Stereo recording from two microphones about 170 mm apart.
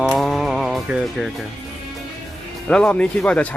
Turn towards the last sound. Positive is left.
turn(degrees=5)  # may be behind; listen again after turning